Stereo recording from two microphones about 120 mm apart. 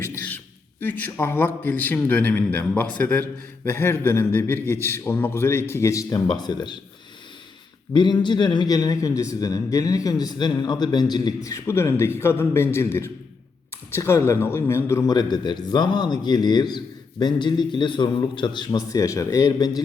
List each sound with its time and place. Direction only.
0.0 s a man's voice: 15° left (ahead or behind); by 6.7 s 35° left (ahead or behind)
7.9 s a man's voice: 40° left (ahead or behind)
11.4 s a man's voice: 25° left (ahead or behind)
15.1 s a man's voice: 35° left (ahead or behind)